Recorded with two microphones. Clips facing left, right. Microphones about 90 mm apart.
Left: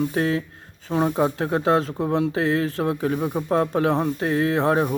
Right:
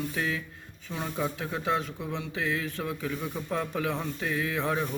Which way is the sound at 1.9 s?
45° left (ahead or behind).